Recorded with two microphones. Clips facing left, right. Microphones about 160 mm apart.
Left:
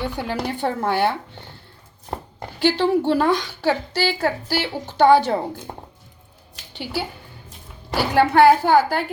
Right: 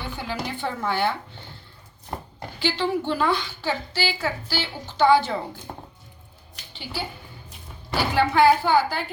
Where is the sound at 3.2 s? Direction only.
55° left (ahead or behind).